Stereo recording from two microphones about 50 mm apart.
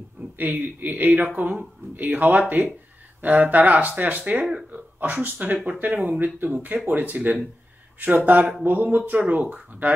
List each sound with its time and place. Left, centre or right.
0.4 s a man's voice: right